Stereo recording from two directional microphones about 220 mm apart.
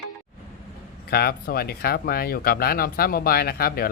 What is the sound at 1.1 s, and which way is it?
Speech, 45° left (ahead or behind).